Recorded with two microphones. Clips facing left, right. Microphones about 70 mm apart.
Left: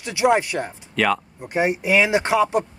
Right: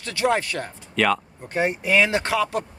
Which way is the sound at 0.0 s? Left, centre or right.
Centre.